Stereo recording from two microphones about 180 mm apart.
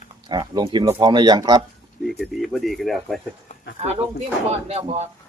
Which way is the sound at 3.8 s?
35° right (ahead or behind).